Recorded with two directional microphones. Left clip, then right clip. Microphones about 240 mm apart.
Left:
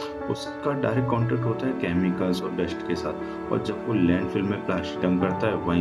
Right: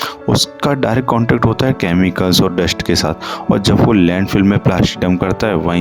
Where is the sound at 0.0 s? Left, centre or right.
Right.